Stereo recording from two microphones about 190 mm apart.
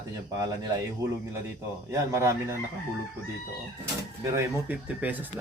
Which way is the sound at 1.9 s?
15° right (ahead or behind).